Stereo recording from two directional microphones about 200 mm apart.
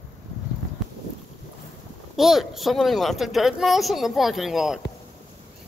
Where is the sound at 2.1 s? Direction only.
Centre (ahead or behind).